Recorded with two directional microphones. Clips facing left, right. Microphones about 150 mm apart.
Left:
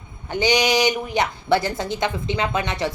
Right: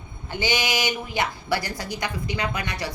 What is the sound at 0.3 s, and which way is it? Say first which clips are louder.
A woman's voice: left 6 dB; 20° left (ahead or behind).